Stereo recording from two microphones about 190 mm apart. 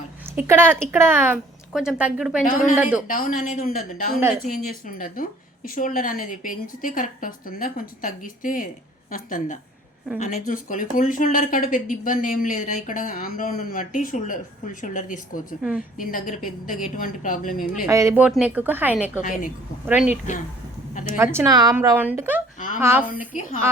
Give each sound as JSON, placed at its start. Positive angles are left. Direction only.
{"t": 0.3, "sound": "a woman's voice", "side_deg": -10}
{"t": 2.4, "sound": "speech", "side_deg": 45}
{"t": 2.7, "sound": "a woman's voice", "side_deg": -10}
{"t": 3.1, "sound": "speech", "side_deg": 45}
{"t": 17.8, "sound": "a woman's voice", "side_deg": -15}
{"t": 19.2, "sound": "speech", "side_deg": 45}
{"t": 21.3, "sound": "a woman's voice", "side_deg": -20}
{"t": 23.3, "sound": "speech", "side_deg": 40}